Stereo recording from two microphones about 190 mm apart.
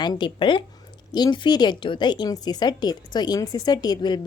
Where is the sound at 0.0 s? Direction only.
25° left (ahead or behind).